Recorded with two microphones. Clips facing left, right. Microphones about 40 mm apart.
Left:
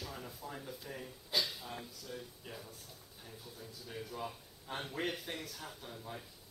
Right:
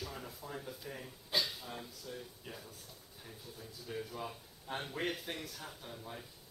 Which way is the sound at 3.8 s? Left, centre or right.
Centre.